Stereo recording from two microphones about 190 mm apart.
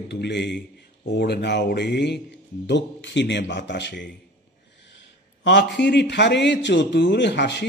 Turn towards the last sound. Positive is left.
turn(degrees=65)  # may be behind; listen again after turning